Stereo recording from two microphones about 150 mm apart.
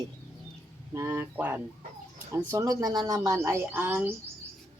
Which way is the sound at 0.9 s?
15° right (ahead or behind).